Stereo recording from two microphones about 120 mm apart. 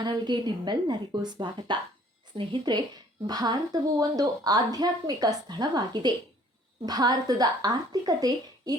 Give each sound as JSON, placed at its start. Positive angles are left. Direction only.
{"t": 0.0, "sound": "a woman's voice", "side_deg": -40}